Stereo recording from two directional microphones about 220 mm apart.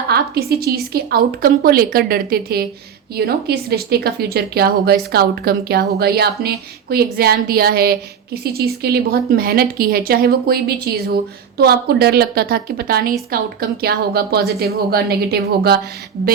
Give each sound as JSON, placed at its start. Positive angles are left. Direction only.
{"t": 0.1, "sound": "a woman's voice", "side_deg": -45}